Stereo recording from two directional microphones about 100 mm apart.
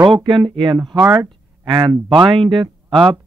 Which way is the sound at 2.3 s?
55° right (ahead or behind).